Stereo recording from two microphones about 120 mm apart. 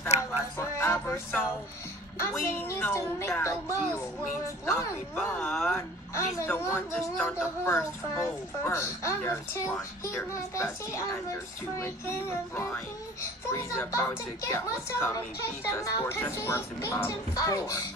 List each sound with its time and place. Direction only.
0.1 s a sound: 65° left (ahead or behind)
0.6 s music: 20° left (ahead or behind)
2.1 s speech: 25° left (ahead or behind)
4.6 s speech: 20° left (ahead or behind)
5.3 s speech: 5° left (ahead or behind)
5.8 s speech: 20° left (ahead or behind)